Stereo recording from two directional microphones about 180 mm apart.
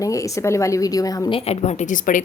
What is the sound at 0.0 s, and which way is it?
A woman's voice, 20° left (ahead or behind).